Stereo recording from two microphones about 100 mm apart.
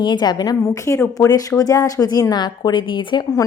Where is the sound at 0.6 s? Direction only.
30° left (ahead or behind); by 3.3 s 50° left (ahead or behind).